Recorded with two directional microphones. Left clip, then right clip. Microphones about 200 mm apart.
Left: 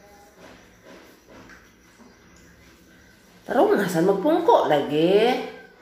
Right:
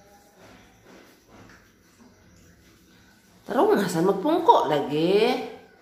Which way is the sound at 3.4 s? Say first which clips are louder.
Left 2 dB; 15° right (ahead or behind).